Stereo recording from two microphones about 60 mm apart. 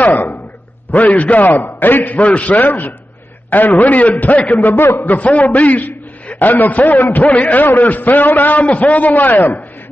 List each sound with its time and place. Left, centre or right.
0.0 s a man's voice: left